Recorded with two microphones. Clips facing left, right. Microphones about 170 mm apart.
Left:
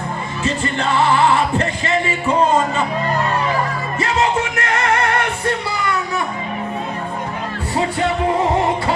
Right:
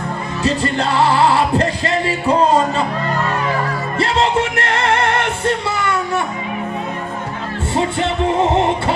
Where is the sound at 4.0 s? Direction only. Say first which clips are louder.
Right 2 dB; 30° right (ahead or behind).